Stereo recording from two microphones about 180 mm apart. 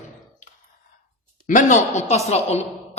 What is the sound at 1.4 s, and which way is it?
Speech, 45° left (ahead or behind).